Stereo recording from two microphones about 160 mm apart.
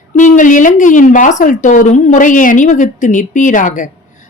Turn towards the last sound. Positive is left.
turn(degrees=55)  # may be behind; listen again after turning